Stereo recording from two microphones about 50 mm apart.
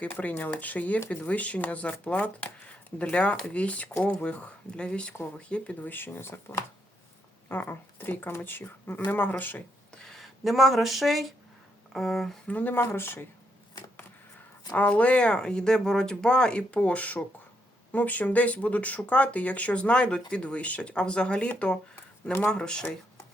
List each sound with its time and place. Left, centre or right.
0.0 s speech: left
5.9 s speech: left
6.2 s speech: left
7.4 s speech: left
9.9 s a sound: centre
10.2 s speech: centre
12.5 s speech: left
12.8 s speech: left
14.7 s speech: left